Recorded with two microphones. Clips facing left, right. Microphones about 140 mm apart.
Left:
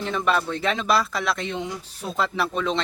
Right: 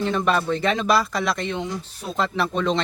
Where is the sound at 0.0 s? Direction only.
Centre (ahead or behind).